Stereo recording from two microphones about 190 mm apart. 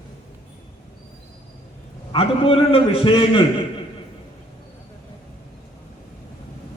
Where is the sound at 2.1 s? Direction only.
30° left (ahead or behind).